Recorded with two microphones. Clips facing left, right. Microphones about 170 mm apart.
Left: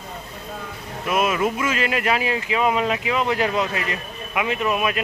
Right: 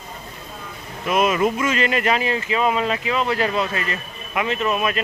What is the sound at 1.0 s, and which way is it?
Speech, 5° left (ahead or behind).